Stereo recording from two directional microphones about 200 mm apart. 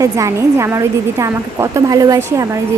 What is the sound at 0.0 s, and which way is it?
A woman's voice, 15° right (ahead or behind).